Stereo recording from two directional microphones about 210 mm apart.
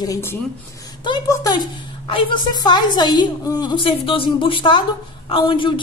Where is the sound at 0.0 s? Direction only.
15° left (ahead or behind).